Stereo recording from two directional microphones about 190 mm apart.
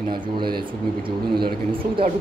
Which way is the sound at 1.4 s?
25° right (ahead or behind).